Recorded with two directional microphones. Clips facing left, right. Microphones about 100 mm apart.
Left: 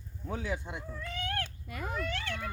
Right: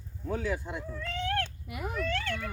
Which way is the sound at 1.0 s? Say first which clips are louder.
Right 5 dB; 5° left (ahead or behind).